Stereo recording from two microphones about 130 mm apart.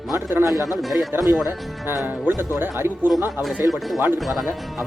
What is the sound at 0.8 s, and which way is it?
Speech, centre (ahead or behind).